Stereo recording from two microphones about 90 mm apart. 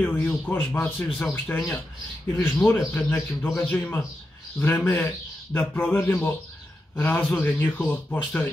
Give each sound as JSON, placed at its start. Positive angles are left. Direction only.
{"t": 0.0, "sound": "a man's voice", "side_deg": 20}